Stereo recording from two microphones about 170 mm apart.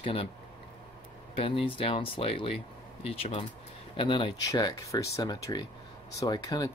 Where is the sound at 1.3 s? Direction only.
35° left (ahead or behind).